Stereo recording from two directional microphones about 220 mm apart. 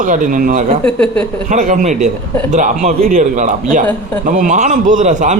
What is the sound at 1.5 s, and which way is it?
Speech, 35° right (ahead or behind).